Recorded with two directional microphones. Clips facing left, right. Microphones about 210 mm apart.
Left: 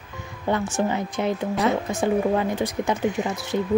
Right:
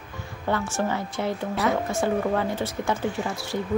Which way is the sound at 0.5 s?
20° left (ahead or behind).